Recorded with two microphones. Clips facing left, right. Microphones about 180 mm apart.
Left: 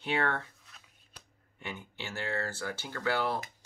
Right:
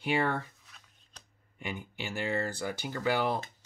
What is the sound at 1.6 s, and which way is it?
Speech, 15° right (ahead or behind).